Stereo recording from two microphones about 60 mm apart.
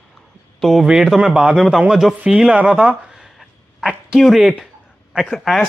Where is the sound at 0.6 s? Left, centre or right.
Centre.